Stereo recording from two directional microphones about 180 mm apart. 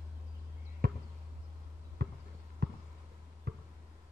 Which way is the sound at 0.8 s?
60° right (ahead or behind).